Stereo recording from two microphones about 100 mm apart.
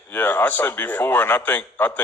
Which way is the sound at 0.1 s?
20° left (ahead or behind).